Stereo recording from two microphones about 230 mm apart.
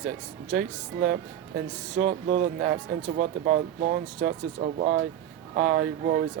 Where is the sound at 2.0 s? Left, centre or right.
Right.